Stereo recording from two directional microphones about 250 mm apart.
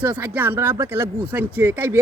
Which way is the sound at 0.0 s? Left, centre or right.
Centre.